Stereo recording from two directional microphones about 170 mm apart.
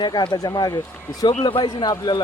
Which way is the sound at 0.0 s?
25° left (ahead or behind).